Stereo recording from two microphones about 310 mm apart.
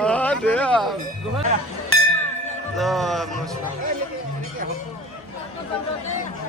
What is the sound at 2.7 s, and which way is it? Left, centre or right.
Speech, centre.